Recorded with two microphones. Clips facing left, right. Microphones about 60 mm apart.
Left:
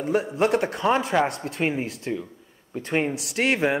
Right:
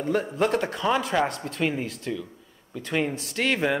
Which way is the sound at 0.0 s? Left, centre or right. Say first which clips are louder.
Left 2 dB; centre.